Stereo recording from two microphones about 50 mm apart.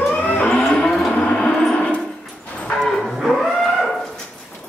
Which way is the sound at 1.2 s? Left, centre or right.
Centre.